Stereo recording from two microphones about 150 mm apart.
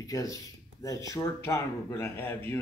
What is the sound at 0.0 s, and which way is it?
Speech, 25° left (ahead or behind).